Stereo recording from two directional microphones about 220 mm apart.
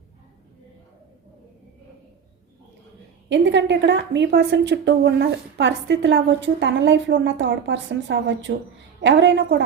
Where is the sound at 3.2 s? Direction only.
55° right (ahead or behind).